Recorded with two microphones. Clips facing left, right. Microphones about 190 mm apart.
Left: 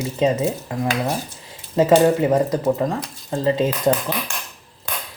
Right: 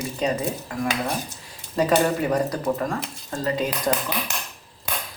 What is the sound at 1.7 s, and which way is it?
Speech, 20° left (ahead or behind).